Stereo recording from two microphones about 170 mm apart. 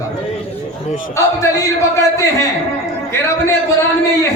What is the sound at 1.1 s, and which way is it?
Speech, 15° left (ahead or behind).